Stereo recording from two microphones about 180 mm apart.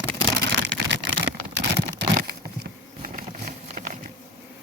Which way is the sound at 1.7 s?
60° right (ahead or behind).